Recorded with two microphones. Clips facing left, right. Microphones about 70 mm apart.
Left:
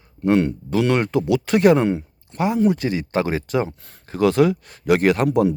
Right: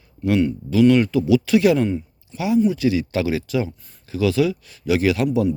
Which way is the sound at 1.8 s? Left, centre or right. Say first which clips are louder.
Left 3 dB; left.